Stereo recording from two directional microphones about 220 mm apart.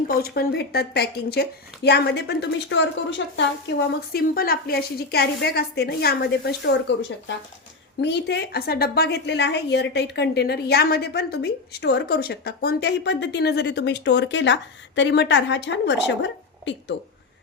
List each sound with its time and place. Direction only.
0.1 s a woman's voice: 45° left (ahead or behind)
4.1 s a woman's voice: 45° left (ahead or behind)